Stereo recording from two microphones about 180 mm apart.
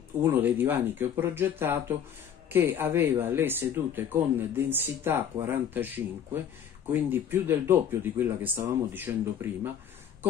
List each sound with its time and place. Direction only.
0.2 s speech: 10° right (ahead or behind)
6.9 s speech: 10° right (ahead or behind)